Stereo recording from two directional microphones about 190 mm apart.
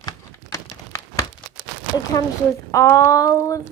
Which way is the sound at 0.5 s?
15° left (ahead or behind).